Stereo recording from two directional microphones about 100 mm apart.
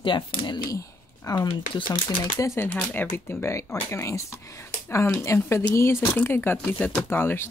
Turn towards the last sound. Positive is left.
turn(degrees=20)  # may be behind; listen again after turning